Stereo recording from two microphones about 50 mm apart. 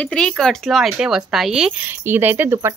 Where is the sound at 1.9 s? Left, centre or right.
Right.